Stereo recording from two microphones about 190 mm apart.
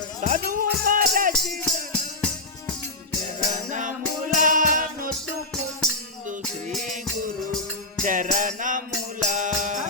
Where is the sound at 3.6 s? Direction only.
40° right (ahead or behind).